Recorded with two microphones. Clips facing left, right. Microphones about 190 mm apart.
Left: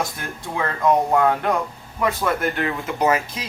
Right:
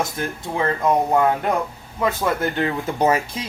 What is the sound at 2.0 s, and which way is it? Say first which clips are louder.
Speech: right 1 dB; 20° right (ahead or behind).